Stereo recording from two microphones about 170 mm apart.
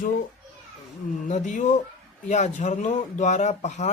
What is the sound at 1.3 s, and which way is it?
Speech, 45° left (ahead or behind).